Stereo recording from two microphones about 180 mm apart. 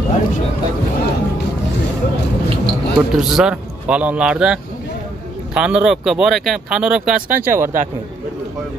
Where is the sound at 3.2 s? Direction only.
5° right (ahead or behind).